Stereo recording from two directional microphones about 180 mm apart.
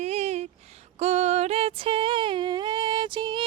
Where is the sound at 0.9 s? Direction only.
40° right (ahead or behind).